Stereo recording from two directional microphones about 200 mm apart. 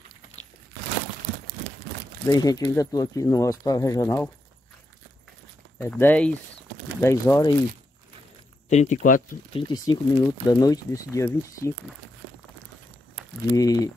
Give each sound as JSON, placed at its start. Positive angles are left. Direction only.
{"t": 2.2, "sound": "speech", "side_deg": 20}
{"t": 5.8, "sound": "speech", "side_deg": 10}
{"t": 8.6, "sound": "speech", "side_deg": 35}
{"t": 9.5, "sound": "speech", "side_deg": 25}
{"t": 13.5, "sound": "speech", "side_deg": 15}